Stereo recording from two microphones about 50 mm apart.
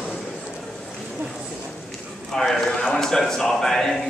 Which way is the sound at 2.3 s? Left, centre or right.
Centre.